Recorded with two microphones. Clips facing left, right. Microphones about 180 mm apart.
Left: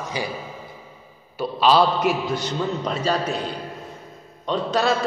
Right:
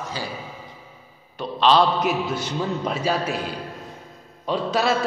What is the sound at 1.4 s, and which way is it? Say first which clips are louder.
A man's voice: left 1 dB; 5° left (ahead or behind).